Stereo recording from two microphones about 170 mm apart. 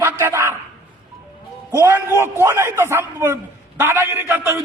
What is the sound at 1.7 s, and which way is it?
A man's voice, 15° right (ahead or behind).